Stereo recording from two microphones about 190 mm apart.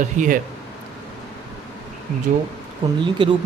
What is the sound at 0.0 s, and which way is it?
Speech, 40° right (ahead or behind).